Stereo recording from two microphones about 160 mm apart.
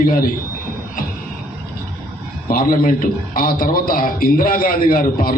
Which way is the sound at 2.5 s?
60° left (ahead or behind).